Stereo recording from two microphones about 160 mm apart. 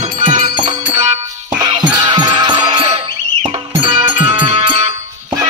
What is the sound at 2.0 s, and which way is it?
Music, 30° right (ahead or behind).